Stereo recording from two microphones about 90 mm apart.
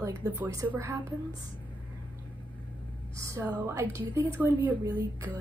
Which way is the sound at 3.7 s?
30° right (ahead or behind).